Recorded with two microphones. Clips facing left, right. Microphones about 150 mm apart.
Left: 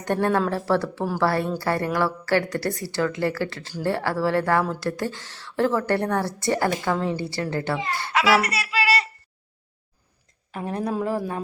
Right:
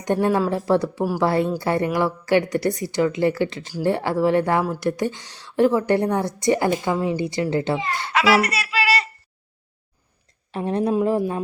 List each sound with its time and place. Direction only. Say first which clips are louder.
0.0 s a woman's voice: right 2 dB; 15° right (ahead or behind)
8.4 s a sound: right 1 dB; 90° right
10.5 s speech: right 6 dB; 25° right (ahead or behind)